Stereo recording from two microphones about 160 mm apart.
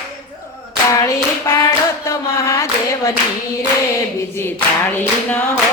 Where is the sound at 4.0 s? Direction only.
15° left (ahead or behind).